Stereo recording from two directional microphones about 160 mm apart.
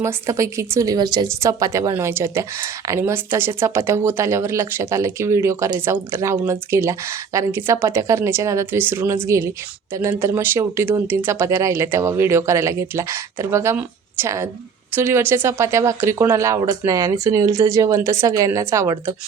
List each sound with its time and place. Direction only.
0.0 s speech: 20° right (ahead or behind)